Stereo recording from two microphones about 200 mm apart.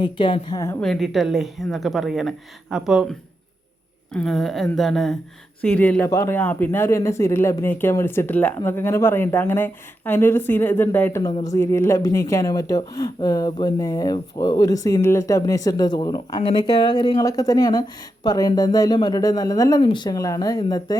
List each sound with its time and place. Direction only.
0.0 s speech: 25° left (ahead or behind)
0.8 s a woman's voice: centre (ahead or behind); by 20.9 s 20° left (ahead or behind)